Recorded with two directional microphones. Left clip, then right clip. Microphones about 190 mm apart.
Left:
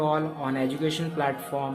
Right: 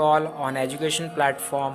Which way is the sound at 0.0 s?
35° right (ahead or behind).